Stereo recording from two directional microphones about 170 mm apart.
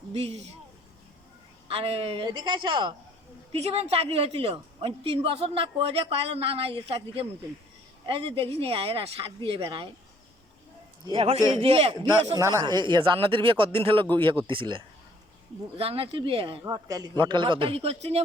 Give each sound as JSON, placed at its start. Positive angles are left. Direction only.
{"t": 0.1, "sound": "a woman's voice", "side_deg": -35}
{"t": 1.6, "sound": "a woman's voice", "side_deg": -35}
{"t": 11.0, "sound": "a woman's voice", "side_deg": -30}
{"t": 12.4, "sound": "a woman's voice", "side_deg": -20}
{"t": 16.6, "sound": "speech", "side_deg": -20}